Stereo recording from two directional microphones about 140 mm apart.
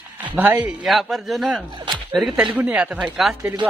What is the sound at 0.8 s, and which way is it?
A man's voice, centre (ahead or behind).